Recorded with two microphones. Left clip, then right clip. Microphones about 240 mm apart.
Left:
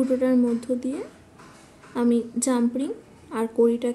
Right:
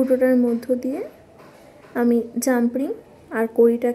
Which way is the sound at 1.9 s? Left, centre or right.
Centre.